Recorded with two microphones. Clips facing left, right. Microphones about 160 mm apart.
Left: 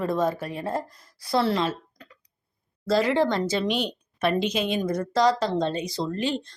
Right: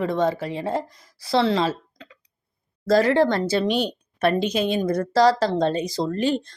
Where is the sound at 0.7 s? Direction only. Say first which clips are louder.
Right 2 dB; 90° right.